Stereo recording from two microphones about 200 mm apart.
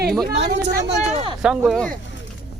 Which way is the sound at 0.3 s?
55° right (ahead or behind).